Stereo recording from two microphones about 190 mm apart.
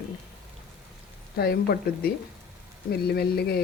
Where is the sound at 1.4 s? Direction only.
55° left (ahead or behind).